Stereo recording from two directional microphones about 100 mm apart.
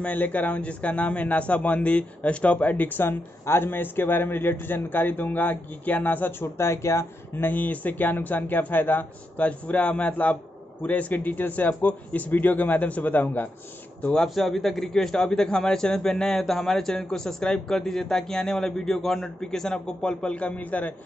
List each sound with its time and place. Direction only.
0.0 s a man's voice: 15° left (ahead or behind)
14.0 s a man's voice: 5° left (ahead or behind)